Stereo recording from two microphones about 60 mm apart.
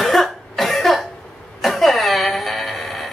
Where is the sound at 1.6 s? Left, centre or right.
Centre.